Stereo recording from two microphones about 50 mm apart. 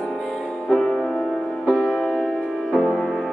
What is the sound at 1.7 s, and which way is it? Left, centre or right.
Music, centre.